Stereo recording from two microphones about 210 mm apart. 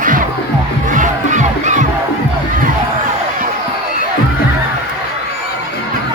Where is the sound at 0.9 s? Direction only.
35° right (ahead or behind).